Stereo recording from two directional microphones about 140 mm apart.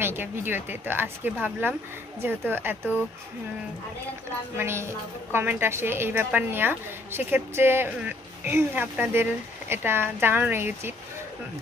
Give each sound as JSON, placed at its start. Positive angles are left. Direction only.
{"t": 0.0, "sound": "a woman's voice", "side_deg": -15}
{"t": 4.6, "sound": "a woman's voice", "side_deg": -15}